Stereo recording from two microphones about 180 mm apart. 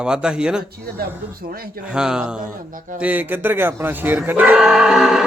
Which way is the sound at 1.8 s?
5° right (ahead or behind).